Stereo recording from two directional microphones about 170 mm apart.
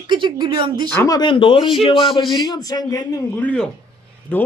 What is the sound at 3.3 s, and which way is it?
Speech, 5° left (ahead or behind).